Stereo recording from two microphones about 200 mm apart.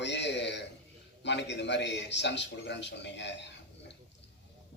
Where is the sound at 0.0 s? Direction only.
60° left (ahead or behind).